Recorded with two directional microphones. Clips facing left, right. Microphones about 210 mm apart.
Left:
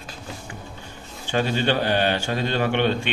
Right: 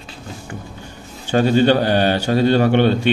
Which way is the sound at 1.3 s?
40° right (ahead or behind).